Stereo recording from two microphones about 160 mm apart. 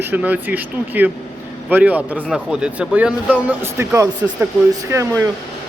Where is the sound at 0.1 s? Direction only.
10° right (ahead or behind).